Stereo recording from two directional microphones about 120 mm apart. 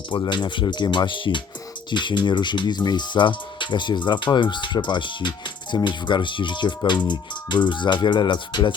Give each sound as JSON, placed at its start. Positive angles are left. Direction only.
{"t": 0.1, "sound": "speech", "side_deg": 40}